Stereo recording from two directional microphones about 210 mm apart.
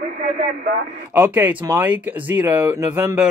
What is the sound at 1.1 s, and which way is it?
Speech, 10° right (ahead or behind).